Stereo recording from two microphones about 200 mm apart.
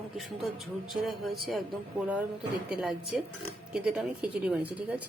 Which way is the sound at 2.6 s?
Centre (ahead or behind).